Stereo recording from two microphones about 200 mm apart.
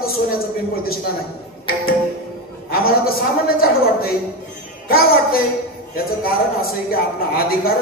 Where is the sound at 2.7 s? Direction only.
50° left (ahead or behind).